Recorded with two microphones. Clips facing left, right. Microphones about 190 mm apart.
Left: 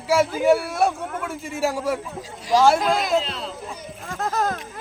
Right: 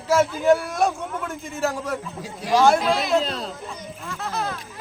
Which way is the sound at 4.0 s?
45° left (ahead or behind).